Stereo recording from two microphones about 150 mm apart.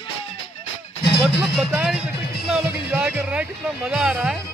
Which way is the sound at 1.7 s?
10° right (ahead or behind).